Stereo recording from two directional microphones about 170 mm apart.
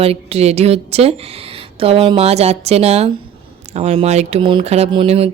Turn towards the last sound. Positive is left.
turn(degrees=-35)  # may be behind; listen again after turning